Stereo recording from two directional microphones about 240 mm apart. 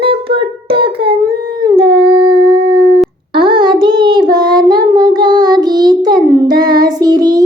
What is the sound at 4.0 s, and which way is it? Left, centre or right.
Child singing, centre.